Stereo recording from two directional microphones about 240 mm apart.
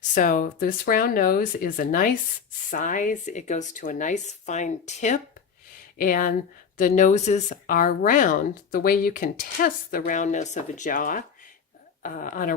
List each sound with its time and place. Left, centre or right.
0.1 s speech: left